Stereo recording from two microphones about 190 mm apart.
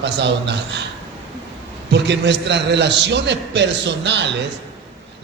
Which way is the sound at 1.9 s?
65° right (ahead or behind).